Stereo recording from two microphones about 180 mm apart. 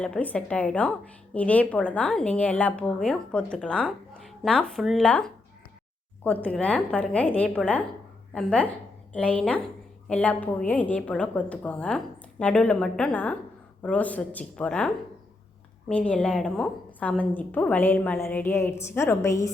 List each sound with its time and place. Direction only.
0.0 s a woman's voice: 5° left (ahead or behind)